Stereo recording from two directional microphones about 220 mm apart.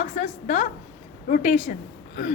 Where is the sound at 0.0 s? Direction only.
30° left (ahead or behind).